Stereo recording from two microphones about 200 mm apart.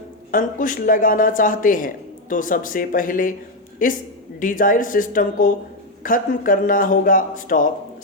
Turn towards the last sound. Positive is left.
turn(degrees=40)  # may be behind; listen again after turning